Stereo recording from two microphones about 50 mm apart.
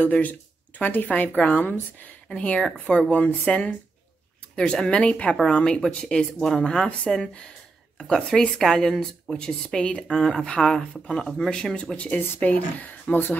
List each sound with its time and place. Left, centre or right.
0.0 s a woman's voice: left
2.2 s speech: left
3.1 s a woman's voice: left
4.6 s speech: centre
8.0 s speech: centre
12.0 s a woman's voice: left